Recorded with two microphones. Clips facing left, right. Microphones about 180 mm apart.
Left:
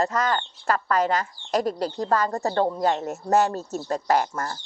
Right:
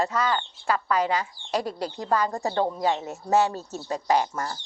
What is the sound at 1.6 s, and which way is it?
Speech, 40° left (ahead or behind).